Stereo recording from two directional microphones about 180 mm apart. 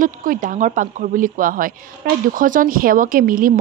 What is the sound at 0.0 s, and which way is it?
Speech, 50° right (ahead or behind).